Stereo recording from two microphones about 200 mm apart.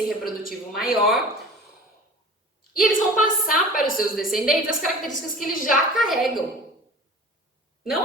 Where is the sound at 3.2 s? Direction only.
45° left (ahead or behind).